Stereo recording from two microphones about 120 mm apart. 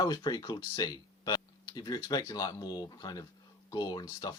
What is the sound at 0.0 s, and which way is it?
Speech, 35° left (ahead or behind).